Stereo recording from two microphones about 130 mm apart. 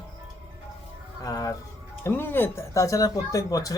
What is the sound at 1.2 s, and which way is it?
Music, 30° left (ahead or behind).